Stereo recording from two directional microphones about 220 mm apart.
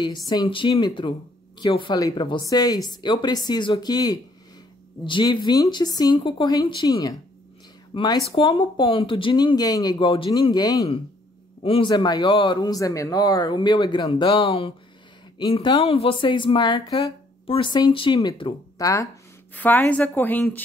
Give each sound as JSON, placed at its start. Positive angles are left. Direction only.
{"t": 0.0, "sound": "a woman's voice", "side_deg": 20}